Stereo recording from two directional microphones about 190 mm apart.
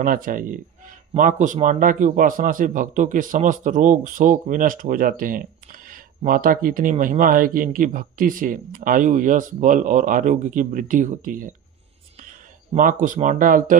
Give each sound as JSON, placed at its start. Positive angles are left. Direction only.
{"t": 0.0, "sound": "speech", "side_deg": -45}
{"t": 12.7, "sound": "speech", "side_deg": -45}